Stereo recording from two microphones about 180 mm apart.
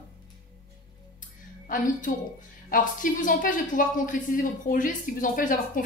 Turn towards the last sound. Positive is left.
turn(degrees=50)  # may be behind; listen again after turning